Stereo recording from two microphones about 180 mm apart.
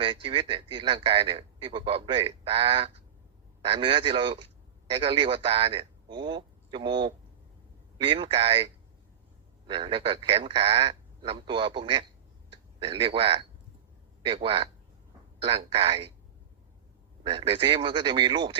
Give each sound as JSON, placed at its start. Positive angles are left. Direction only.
{"t": 0.0, "sound": "a man's voice", "side_deg": -30}
{"t": 17.2, "sound": "a man's voice", "side_deg": -30}